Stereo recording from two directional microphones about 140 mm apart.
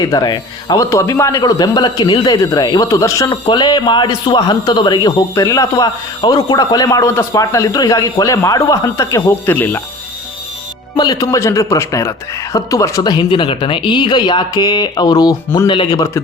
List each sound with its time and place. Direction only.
0.0 s a man's voice: 30° left (ahead or behind)
10.9 s a man's voice: 30° left (ahead or behind)